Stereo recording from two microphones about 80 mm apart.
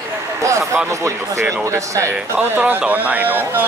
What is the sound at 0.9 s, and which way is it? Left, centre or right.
Speech, right.